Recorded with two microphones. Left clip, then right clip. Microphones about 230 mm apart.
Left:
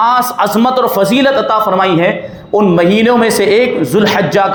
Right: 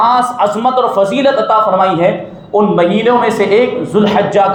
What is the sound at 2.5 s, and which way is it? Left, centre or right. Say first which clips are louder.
A man's voice: left 1 dB; left.